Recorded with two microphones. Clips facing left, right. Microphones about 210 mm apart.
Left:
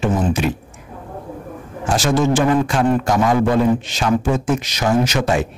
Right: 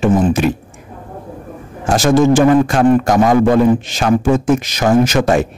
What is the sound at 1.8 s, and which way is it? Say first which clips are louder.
Speech: right 6 dB; 45° right (ahead or behind).